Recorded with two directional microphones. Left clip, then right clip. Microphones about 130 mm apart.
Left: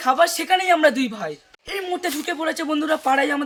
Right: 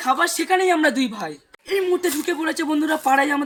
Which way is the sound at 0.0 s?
25° left (ahead or behind).